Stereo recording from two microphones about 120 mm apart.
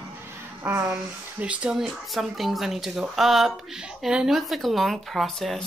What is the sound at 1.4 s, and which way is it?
Speech, 10° right (ahead or behind).